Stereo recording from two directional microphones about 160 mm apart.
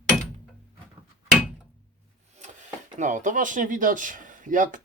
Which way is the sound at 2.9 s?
50° right (ahead or behind).